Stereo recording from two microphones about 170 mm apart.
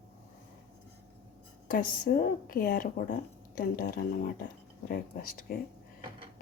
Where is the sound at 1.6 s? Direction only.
55° left (ahead or behind).